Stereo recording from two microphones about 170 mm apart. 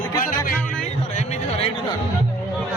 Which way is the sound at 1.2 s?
40° left (ahead or behind).